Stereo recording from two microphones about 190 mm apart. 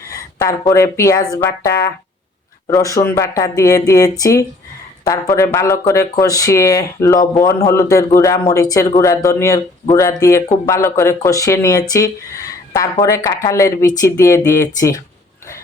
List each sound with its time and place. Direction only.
0.1 s speech: 15° left (ahead or behind)
2.6 s speech: 15° left (ahead or behind)